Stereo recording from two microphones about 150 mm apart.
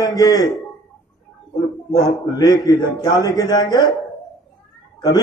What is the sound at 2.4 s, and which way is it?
A man's voice, 25° left (ahead or behind).